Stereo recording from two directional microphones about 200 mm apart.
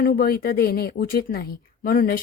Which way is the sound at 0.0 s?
50° left (ahead or behind).